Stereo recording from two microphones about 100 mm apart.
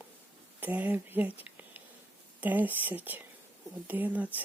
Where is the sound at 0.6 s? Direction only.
15° right (ahead or behind).